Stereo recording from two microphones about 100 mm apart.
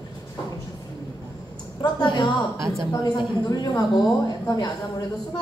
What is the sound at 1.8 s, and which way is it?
Speech, 45° left (ahead or behind).